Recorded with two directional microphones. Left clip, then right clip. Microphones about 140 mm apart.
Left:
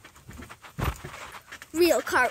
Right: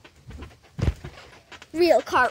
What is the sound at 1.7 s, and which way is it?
Speech, 20° left (ahead or behind).